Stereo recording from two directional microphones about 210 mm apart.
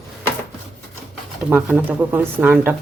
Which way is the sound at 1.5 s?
10° right (ahead or behind).